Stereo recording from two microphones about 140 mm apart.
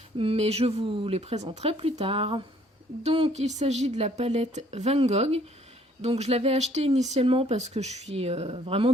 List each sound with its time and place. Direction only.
0.2 s speech: 45° right (ahead or behind)